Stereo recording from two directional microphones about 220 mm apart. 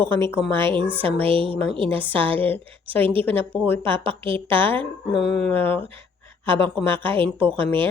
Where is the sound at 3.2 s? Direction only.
10° left (ahead or behind).